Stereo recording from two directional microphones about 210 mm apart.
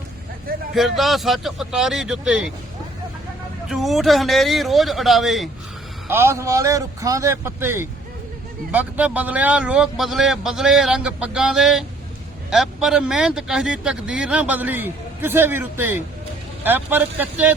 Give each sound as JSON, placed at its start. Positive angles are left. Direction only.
{"t": 0.7, "sound": "speech", "side_deg": 0}
{"t": 3.7, "sound": "speech", "side_deg": 0}
{"t": 6.1, "sound": "a man's voice", "side_deg": -10}